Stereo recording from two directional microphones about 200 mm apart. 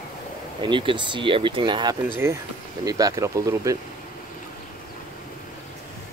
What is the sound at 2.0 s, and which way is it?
Speech, 10° right (ahead or behind).